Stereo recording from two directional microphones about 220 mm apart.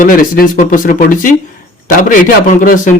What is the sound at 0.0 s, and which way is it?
Speech, 40° left (ahead or behind).